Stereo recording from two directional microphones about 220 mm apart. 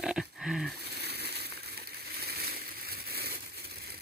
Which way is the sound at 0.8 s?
45° right (ahead or behind).